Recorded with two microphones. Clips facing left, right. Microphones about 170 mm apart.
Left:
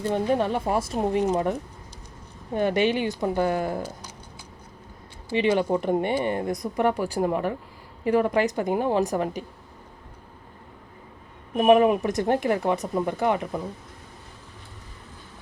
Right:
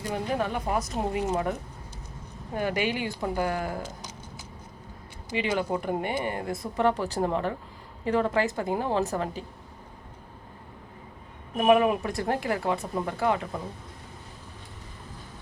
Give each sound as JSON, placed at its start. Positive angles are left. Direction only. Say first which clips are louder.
{"t": 0.1, "sound": "speech", "louder": "left 5 dB", "side_deg": 30}
{"t": 2.6, "sound": "speech", "louder": "left 5 dB", "side_deg": 25}
{"t": 5.4, "sound": "a woman's voice", "louder": "left 6 dB", "side_deg": 20}
{"t": 11.5, "sound": "speech", "louder": "left 4 dB", "side_deg": 25}